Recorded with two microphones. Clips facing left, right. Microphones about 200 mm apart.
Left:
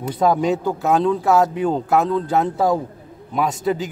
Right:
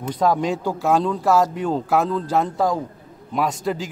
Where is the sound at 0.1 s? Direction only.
5° left (ahead or behind).